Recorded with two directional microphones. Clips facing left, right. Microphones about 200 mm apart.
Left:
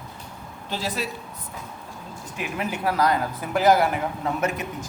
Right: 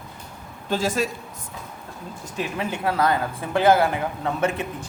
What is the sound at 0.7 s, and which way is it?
Speech, 45° right (ahead or behind).